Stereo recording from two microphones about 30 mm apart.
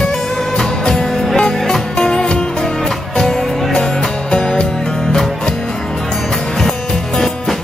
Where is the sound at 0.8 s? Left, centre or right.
Centre.